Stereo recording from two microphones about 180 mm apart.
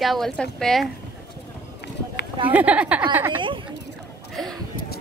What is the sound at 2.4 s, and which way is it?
Speech, 10° right (ahead or behind).